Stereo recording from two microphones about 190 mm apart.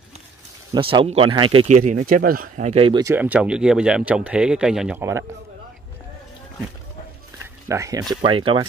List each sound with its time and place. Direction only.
0.7 s speech: 30° right (ahead or behind)
1.8 s speech: 40° right (ahead or behind); by 5.2 s 10° right (ahead or behind)
7.6 s speech: 15° right (ahead or behind)